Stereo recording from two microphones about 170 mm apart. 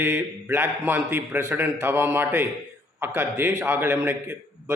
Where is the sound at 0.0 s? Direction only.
15° right (ahead or behind).